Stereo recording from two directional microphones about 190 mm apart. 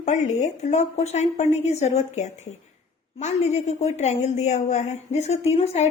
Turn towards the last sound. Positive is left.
turn(degrees=35)  # may be behind; listen again after turning